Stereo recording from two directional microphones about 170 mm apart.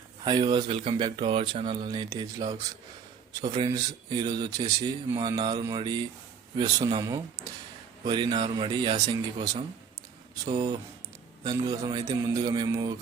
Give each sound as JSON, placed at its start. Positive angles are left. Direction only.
{"t": 0.3, "sound": "speech", "side_deg": -25}
{"t": 3.7, "sound": "speech", "side_deg": -25}